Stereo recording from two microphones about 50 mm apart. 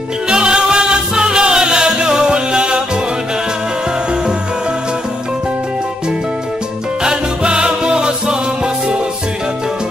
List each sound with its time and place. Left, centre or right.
0.3 s music: centre
7.0 s music: centre